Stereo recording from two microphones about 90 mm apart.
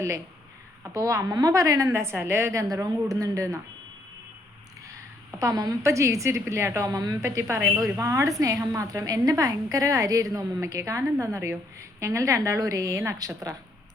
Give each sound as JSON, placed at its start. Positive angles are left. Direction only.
{"t": 0.9, "sound": "a woman's voice", "side_deg": -35}
{"t": 5.4, "sound": "a woman's voice", "side_deg": -45}
{"t": 7.2, "sound": "a woman's voice", "side_deg": -30}